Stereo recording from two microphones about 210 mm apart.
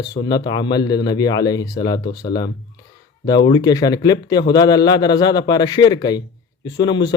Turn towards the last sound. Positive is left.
turn(degrees=20)  # may be behind; listen again after turning